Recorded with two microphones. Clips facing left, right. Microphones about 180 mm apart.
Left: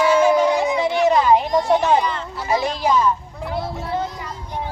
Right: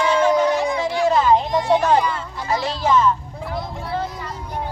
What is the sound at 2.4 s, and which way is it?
Speech, 15° left (ahead or behind).